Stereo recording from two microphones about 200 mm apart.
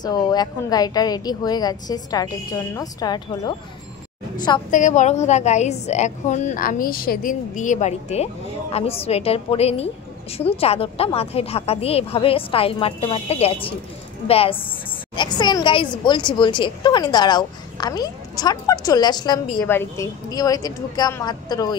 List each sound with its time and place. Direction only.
0.0 s speech: 20° left (ahead or behind)
4.6 s a woman's voice: 40° left (ahead or behind); by 21.7 s 20° left (ahead or behind)